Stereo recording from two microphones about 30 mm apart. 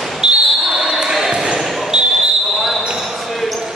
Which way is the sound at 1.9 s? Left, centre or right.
Right.